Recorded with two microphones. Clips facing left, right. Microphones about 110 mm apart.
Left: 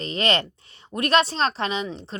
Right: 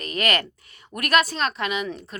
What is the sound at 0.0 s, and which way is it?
A woman's voice, 25° left (ahead or behind).